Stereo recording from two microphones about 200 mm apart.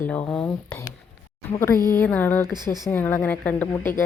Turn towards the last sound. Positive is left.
turn(degrees=10)  # may be behind; listen again after turning